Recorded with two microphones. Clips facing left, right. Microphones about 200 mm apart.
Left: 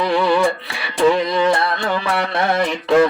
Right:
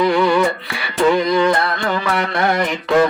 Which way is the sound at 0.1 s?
25° left (ahead or behind).